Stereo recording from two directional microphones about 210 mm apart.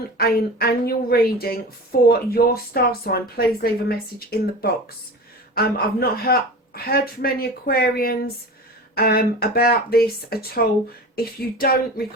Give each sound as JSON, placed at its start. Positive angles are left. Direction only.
{"t": 0.2, "sound": "speech", "side_deg": 45}